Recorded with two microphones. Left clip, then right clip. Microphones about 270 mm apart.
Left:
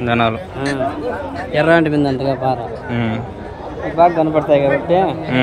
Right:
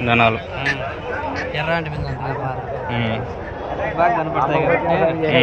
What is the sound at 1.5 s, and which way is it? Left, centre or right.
Speech, left.